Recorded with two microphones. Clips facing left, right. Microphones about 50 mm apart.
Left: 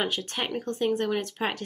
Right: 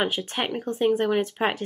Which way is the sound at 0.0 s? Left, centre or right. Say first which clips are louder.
Right 3 dB; centre.